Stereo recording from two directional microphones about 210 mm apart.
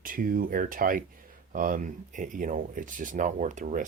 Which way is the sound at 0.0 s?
40° right (ahead or behind).